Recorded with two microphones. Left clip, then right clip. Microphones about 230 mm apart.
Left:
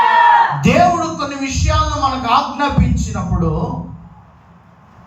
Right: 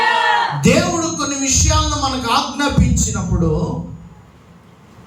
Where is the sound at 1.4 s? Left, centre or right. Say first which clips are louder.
Right 1 dB; centre.